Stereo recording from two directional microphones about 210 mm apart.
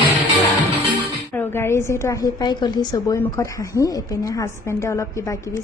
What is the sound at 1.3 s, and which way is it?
A woman's voice, 10° left (ahead or behind).